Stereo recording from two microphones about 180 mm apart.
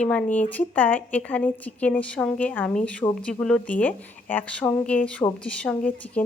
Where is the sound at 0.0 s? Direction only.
5° left (ahead or behind).